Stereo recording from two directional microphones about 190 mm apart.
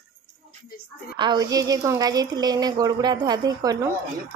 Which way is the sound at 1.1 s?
25° right (ahead or behind).